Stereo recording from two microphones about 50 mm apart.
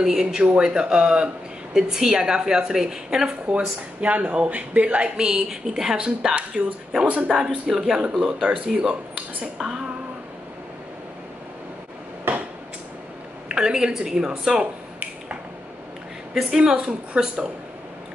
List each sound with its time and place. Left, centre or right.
0.0 s a woman's voice: centre
1.7 s a woman's voice: centre
3.5 s a woman's voice: right
13.5 s a woman's voice: centre
16.3 s a woman's voice: centre
16.7 s a woman's voice: right